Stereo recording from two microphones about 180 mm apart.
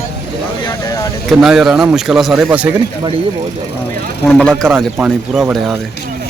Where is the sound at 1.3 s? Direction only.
Centre (ahead or behind).